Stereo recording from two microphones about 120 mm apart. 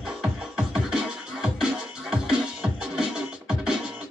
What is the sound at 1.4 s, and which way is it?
Music, 5° right (ahead or behind).